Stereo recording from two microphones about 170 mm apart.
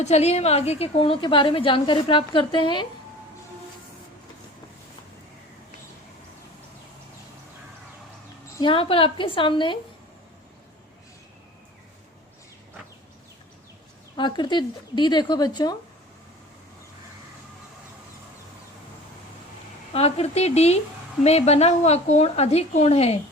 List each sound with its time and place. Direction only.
0.0 s a woman's voice: 40° left (ahead or behind)
8.5 s speech: 30° left (ahead or behind)
14.2 s speech: 25° left (ahead or behind)
19.9 s a woman's voice: 35° left (ahead or behind)